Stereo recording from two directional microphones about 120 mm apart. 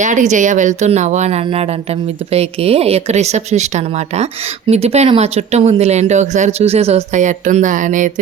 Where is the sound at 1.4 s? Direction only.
55° right (ahead or behind).